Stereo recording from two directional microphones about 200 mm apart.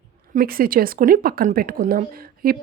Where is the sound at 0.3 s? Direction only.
45° right (ahead or behind).